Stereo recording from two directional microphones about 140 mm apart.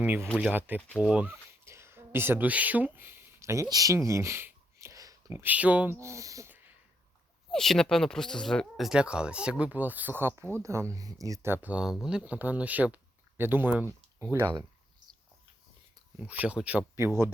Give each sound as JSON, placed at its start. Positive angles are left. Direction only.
{"t": 0.0, "sound": "speech", "side_deg": -15}
{"t": 1.6, "sound": "speech", "side_deg": -20}
{"t": 7.5, "sound": "speech", "side_deg": 5}
{"t": 16.1, "sound": "speech", "side_deg": -10}